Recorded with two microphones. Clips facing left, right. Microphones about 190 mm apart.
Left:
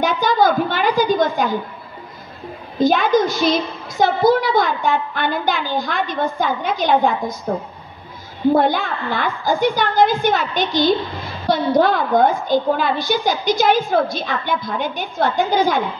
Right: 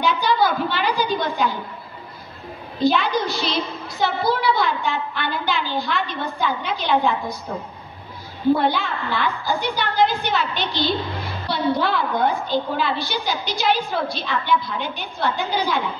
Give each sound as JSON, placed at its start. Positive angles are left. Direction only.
{"t": 0.0, "sound": "a sound", "side_deg": 45}
{"t": 2.8, "sound": "a woman's voice", "side_deg": 45}
{"t": 8.5, "sound": "a woman's voice", "side_deg": 45}